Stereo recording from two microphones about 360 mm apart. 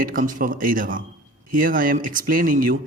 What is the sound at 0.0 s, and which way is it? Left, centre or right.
A man's voice, right.